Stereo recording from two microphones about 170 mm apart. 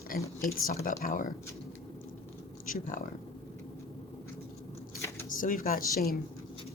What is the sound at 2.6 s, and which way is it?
Speech, 55° left (ahead or behind).